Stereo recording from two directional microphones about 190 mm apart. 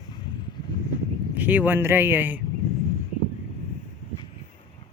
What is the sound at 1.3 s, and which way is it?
Speech, 10° right (ahead or behind).